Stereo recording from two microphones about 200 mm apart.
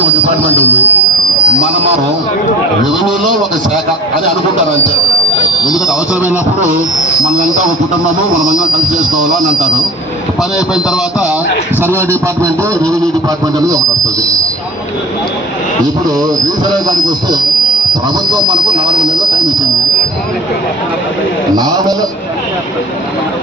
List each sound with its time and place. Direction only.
0.6 s speech: 10° left (ahead or behind)
7.3 s a man's voice: 40° right (ahead or behind)
11.8 s speech: 10° right (ahead or behind)
16.0 s speech: 20° right (ahead or behind)
18.3 s speech: 20° right (ahead or behind)
21.5 s speech: 20° right (ahead or behind)